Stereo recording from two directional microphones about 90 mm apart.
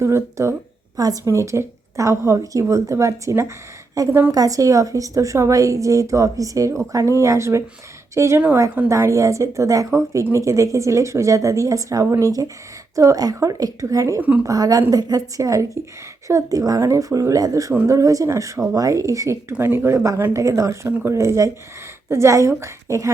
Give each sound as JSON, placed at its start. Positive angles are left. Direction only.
{"t": 0.0, "sound": "a woman's voice", "side_deg": -30}
{"t": 0.9, "sound": "a woman's voice", "side_deg": -40}
{"t": 14.2, "sound": "a woman's voice", "side_deg": -15}
{"t": 14.4, "sound": "a woman's voice", "side_deg": -45}